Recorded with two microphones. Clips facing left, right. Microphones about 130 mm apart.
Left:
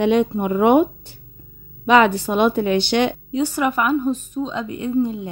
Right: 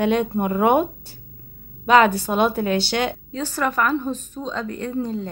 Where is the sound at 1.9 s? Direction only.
40° right (ahead or behind).